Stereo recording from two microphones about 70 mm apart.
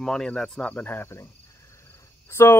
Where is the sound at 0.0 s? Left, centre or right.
Centre; by 1.0 s left.